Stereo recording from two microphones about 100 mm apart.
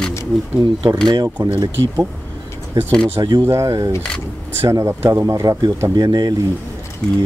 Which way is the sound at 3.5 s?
35° right (ahead or behind).